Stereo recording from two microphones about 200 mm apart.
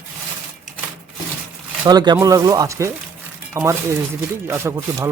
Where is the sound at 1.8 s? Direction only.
20° right (ahead or behind).